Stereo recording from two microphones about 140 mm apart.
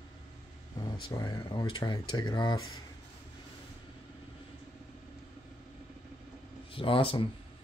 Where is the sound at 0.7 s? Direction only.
25° left (ahead or behind).